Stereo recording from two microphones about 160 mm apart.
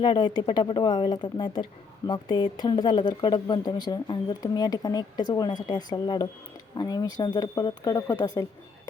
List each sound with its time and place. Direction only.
0.0 s speech: 30° left (ahead or behind)